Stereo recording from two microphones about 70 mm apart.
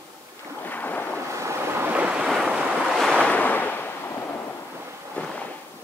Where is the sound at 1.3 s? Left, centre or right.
Right.